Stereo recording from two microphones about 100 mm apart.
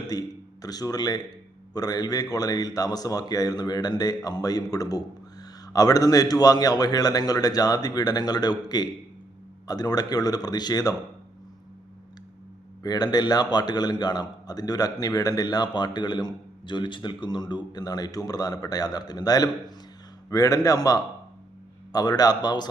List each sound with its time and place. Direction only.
0.1 s speech: 40° left (ahead or behind)
12.8 s a man's voice: 40° left (ahead or behind)